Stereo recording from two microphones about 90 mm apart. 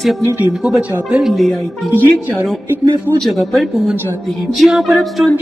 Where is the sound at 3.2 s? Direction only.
Centre (ahead or behind).